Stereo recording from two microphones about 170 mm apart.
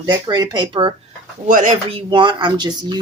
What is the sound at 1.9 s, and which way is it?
Speech, 30° right (ahead or behind).